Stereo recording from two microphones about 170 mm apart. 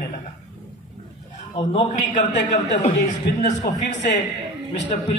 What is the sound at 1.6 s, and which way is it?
A man's voice, 40° left (ahead or behind).